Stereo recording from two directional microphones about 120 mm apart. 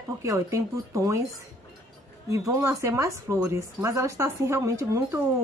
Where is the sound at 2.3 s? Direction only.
30° right (ahead or behind).